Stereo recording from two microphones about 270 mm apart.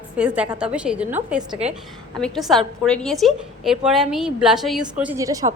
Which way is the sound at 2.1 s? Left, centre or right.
Centre.